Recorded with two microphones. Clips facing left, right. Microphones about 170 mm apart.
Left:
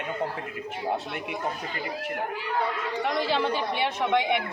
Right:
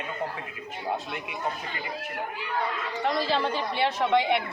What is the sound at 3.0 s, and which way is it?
A woman's voice, 15° left (ahead or behind).